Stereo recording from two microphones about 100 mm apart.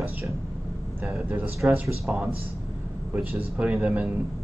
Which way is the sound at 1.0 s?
15° right (ahead or behind).